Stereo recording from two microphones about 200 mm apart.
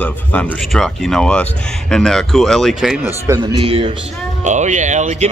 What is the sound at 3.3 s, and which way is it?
A man's voice, 25° right (ahead or behind).